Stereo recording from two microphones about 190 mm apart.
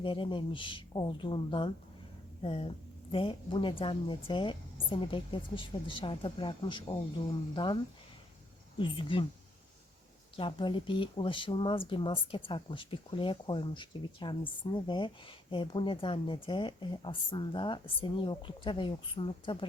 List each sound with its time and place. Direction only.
0.0 s a woman's voice: 25° left (ahead or behind)
8.8 s a woman's voice: 25° left (ahead or behind)
10.3 s a woman's voice: 25° left (ahead or behind)